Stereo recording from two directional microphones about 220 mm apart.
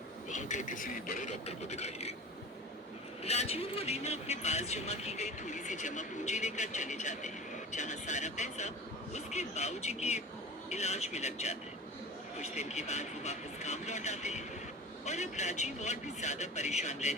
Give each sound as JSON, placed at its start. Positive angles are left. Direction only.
{"t": 0.3, "sound": "speech", "side_deg": 35}
{"t": 3.2, "sound": "speech", "side_deg": 30}